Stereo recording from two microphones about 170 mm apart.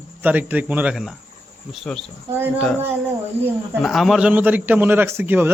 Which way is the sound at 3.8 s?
Centre (ahead or behind).